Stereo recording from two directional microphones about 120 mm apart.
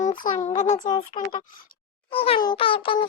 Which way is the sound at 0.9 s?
40° left (ahead or behind).